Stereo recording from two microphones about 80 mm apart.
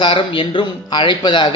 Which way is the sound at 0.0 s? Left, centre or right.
Left.